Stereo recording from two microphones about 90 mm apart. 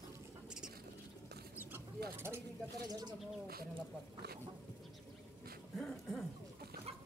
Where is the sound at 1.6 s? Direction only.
25° right (ahead or behind).